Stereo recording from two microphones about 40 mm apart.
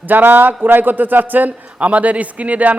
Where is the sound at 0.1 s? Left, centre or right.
Right.